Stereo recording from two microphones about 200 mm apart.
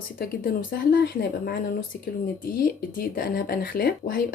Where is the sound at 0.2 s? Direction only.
50° left (ahead or behind).